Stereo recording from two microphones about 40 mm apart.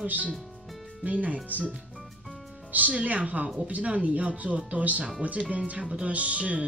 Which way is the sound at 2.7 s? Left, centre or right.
Right.